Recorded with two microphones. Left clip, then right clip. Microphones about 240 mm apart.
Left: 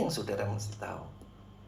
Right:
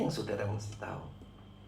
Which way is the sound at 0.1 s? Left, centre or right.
Left.